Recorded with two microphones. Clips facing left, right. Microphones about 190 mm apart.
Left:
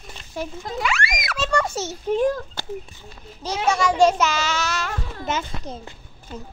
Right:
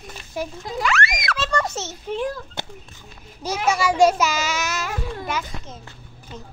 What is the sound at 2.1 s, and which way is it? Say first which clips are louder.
Speech: left 6 dB; 40° left (ahead or behind).